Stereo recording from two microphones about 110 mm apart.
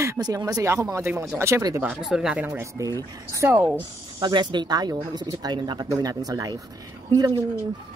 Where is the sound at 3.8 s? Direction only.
45° right (ahead or behind).